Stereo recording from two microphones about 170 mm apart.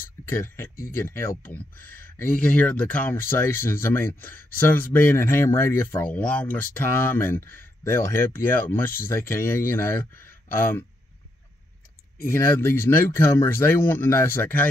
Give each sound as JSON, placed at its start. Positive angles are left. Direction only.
{"t": 0.2, "sound": "speech", "side_deg": 15}
{"t": 12.3, "sound": "speech", "side_deg": 15}